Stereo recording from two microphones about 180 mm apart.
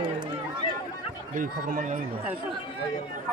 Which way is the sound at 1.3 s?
45° right (ahead or behind).